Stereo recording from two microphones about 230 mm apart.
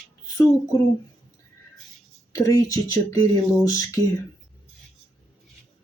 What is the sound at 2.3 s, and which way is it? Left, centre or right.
Speech, centre.